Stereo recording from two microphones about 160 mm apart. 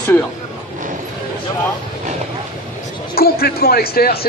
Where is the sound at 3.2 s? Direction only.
75° left (ahead or behind).